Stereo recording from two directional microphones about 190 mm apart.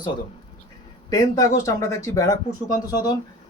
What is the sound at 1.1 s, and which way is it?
Speech, 20° left (ahead or behind).